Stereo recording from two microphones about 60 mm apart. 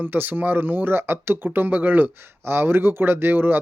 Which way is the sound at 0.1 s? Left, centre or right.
Right.